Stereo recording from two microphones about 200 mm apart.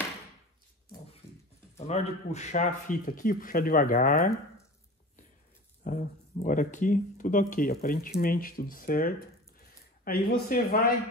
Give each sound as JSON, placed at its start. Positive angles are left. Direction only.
{"t": 1.8, "sound": "speech", "side_deg": 35}
{"t": 5.9, "sound": "speech", "side_deg": 40}
{"t": 9.6, "sound": "a sound", "side_deg": 50}